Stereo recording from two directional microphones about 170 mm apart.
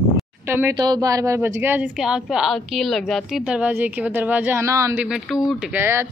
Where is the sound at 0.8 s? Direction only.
25° right (ahead or behind).